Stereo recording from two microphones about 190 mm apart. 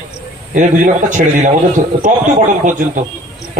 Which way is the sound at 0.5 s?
40° right (ahead or behind).